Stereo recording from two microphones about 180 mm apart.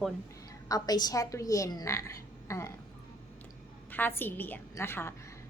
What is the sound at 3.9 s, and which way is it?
A woman's voice, 10° left (ahead or behind).